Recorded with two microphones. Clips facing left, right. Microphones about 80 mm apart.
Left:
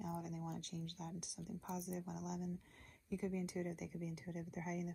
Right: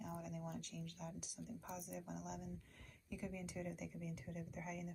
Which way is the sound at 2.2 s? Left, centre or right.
Right.